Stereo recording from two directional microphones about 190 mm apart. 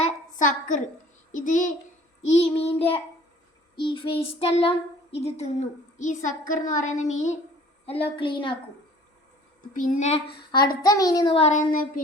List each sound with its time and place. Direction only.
0.0 s a sound: 40° left (ahead or behind)
1.3 s a child's voice: 40° left (ahead or behind)
2.3 s a woman's voice: 30° left (ahead or behind)
9.7 s a child's voice: 45° left (ahead or behind)
10.5 s a child's voice: 20° left (ahead or behind); by 11.9 s 45° left (ahead or behind)